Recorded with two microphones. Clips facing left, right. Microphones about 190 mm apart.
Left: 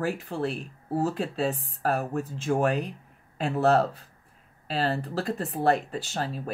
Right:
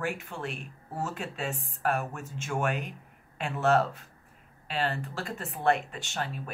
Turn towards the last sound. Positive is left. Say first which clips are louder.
# left 4 dB
turn(degrees=35)  # may be behind; listen again after turning